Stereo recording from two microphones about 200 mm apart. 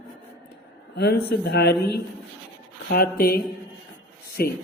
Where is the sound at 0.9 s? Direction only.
55° left (ahead or behind).